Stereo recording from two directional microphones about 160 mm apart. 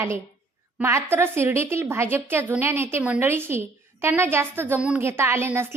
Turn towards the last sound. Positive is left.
turn(degrees=-15)  # may be behind; listen again after turning